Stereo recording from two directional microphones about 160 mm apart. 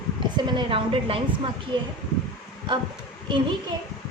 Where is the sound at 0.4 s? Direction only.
30° right (ahead or behind).